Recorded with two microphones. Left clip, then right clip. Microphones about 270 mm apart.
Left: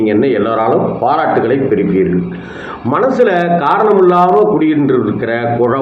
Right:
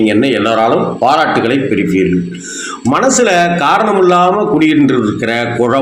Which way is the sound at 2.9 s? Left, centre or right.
Right.